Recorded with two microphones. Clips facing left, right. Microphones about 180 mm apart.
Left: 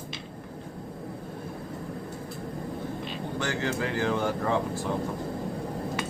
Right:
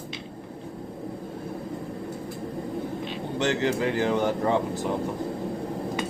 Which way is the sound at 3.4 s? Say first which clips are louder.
Right 6 dB; 20° right (ahead or behind).